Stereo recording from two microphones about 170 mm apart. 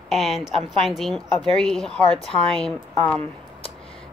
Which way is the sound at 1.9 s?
35° left (ahead or behind).